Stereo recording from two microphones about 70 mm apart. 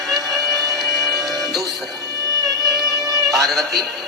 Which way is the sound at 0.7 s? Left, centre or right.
Centre.